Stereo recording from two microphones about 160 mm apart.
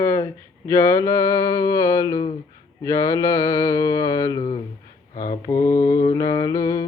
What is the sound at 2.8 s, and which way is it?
Speech, 20° left (ahead or behind).